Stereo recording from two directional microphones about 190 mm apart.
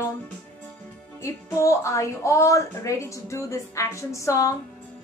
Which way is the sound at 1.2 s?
15° left (ahead or behind).